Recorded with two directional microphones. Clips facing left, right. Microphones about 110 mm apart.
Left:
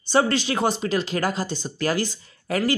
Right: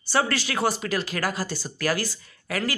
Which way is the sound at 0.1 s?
20° left (ahead or behind).